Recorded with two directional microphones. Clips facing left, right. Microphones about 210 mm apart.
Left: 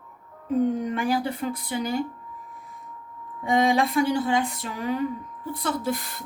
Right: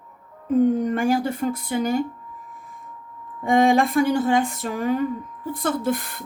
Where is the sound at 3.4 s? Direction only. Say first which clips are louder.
Right 4 dB; 50° right (ahead or behind).